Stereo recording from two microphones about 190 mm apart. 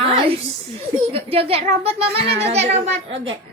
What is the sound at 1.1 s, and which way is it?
A child's voice, 30° right (ahead or behind).